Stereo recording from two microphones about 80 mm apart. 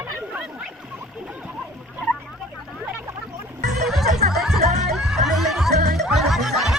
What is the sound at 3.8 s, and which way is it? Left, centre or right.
Music, centre.